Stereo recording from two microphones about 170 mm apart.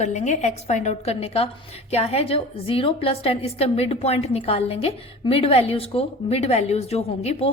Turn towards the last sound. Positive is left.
turn(degrees=35)  # may be behind; listen again after turning